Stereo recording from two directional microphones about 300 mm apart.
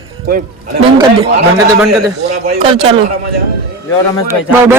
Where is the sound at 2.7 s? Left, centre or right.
Centre.